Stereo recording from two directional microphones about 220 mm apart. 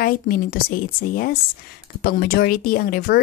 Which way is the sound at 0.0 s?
40° left (ahead or behind).